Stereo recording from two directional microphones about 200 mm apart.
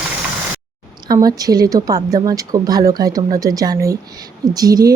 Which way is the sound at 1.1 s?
20° right (ahead or behind).